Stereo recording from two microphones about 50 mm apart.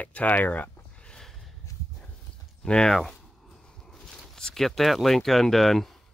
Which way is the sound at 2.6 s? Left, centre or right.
Centre.